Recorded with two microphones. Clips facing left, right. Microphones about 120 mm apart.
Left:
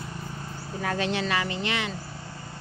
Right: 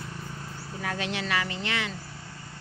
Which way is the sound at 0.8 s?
35° left (ahead or behind).